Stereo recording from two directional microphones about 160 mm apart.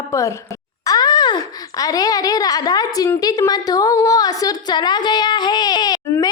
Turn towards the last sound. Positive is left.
turn(degrees=20)  # may be behind; listen again after turning